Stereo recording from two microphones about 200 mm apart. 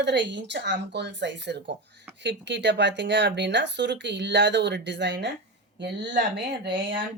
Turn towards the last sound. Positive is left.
turn(degrees=-60)  # may be behind; listen again after turning